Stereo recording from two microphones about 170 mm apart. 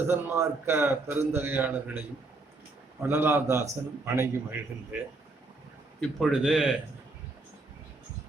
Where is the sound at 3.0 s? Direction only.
15° right (ahead or behind).